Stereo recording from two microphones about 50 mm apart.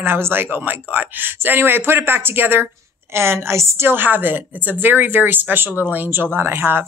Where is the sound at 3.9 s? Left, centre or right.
Right.